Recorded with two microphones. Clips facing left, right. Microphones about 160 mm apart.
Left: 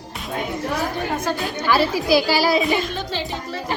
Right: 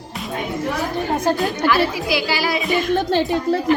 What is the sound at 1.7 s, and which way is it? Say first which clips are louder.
Speech: left 4 dB; 35° left (ahead or behind).